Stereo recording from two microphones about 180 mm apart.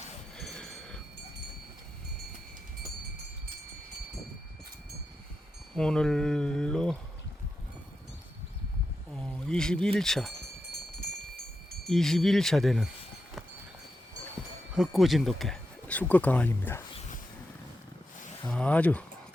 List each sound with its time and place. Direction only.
0.3 s a sound: centre (ahead or behind)
5.7 s speech: 5° left (ahead or behind)
9.1 s speech: 5° left (ahead or behind)
11.9 s speech: centre (ahead or behind)
14.8 s speech: centre (ahead or behind)
18.4 s speech: 5° left (ahead or behind)